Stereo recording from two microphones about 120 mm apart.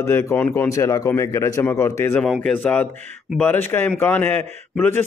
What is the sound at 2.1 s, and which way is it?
Speech, 5° left (ahead or behind).